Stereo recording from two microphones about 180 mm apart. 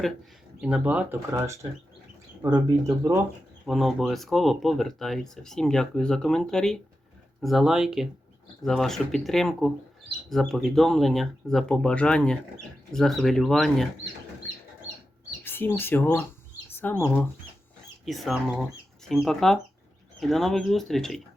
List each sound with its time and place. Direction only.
0.6 s speech: 5° right (ahead or behind)
3.7 s speech: centre (ahead or behind)
14.5 s chicken: 10° left (ahead or behind)
15.4 s speech: 10° left (ahead or behind)